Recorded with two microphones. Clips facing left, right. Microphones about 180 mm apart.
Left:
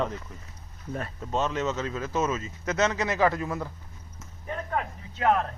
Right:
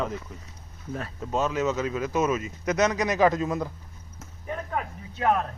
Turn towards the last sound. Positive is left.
turn(degrees=-5)  # may be behind; listen again after turning